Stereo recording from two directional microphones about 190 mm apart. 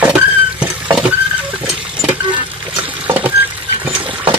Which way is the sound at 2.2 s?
25° right (ahead or behind).